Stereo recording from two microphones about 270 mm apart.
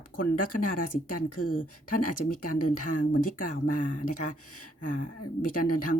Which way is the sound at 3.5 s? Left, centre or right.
Left.